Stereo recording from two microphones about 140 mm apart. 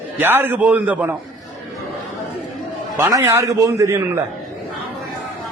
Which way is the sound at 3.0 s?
25° right (ahead or behind).